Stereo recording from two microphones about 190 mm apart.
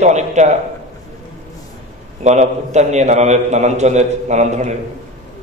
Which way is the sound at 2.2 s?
35° right (ahead or behind).